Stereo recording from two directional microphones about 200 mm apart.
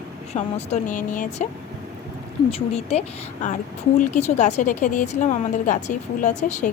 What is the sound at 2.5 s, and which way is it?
Speech, 30° left (ahead or behind).